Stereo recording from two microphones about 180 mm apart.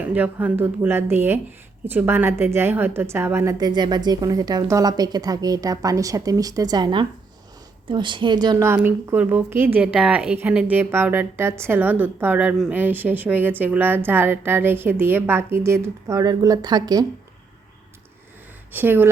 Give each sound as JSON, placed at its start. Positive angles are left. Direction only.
{"t": 0.0, "sound": "a woman's voice", "side_deg": -10}
{"t": 18.7, "sound": "a woman's voice", "side_deg": -10}